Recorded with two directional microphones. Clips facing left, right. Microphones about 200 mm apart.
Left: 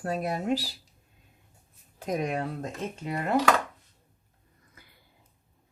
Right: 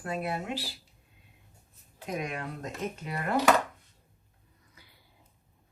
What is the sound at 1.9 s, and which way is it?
Speech, 40° left (ahead or behind).